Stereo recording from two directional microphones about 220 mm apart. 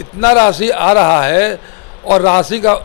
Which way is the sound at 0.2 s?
10° left (ahead or behind).